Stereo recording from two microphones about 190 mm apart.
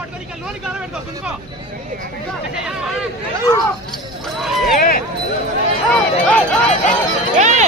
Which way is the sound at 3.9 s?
Centre (ahead or behind).